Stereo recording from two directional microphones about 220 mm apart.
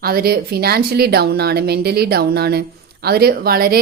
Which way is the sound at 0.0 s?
45° right (ahead or behind).